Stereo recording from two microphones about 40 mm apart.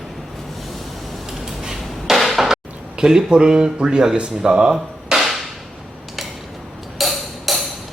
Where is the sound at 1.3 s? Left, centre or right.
Centre.